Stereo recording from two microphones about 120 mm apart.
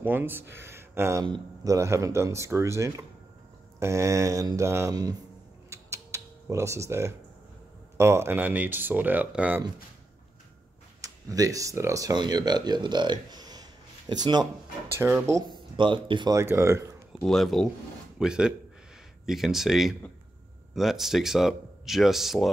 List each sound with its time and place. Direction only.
0.0 s speech: 15° right (ahead or behind)
1.2 s speech: 35° right (ahead or behind)
5.7 s typing: 25° right (ahead or behind)
8.0 s speech: 20° right (ahead or behind)
11.0 s speech: 30° right (ahead or behind)
15.0 s speech: 20° right (ahead or behind)
15.5 s speech: 40° right (ahead or behind)
16.3 s speech: 20° right (ahead or behind)
17.2 s speech: centre (ahead or behind)